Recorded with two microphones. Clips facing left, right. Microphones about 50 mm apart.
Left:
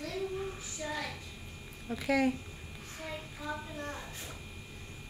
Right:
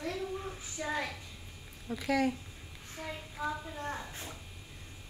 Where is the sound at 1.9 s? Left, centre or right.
Centre.